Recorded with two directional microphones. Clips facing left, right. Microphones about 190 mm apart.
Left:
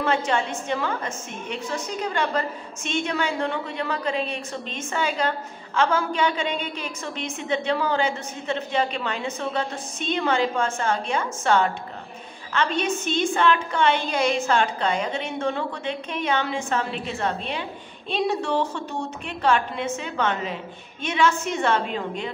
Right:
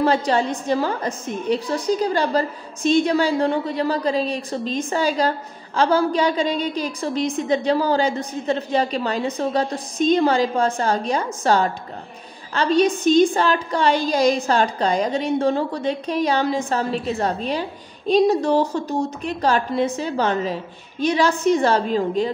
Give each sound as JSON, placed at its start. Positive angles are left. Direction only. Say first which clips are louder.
{"t": 0.0, "sound": "a woman's voice", "louder": "right 5 dB", "side_deg": -35}